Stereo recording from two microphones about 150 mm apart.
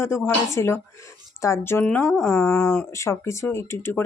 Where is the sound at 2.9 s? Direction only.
20° left (ahead or behind).